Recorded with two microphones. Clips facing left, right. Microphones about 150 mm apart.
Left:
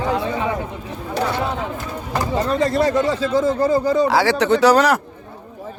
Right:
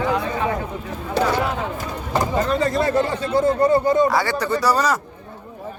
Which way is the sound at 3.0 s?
85° left.